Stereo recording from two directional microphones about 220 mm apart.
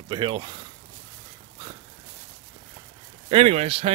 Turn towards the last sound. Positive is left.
turn(degrees=-25)  # may be behind; listen again after turning